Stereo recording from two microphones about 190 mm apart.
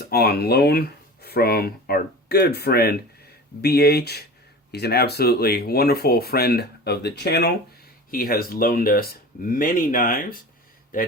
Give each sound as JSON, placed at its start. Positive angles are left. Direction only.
{"t": 0.0, "sound": "speech", "side_deg": 55}